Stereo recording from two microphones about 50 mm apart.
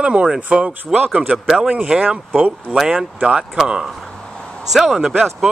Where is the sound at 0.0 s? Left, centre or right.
Right.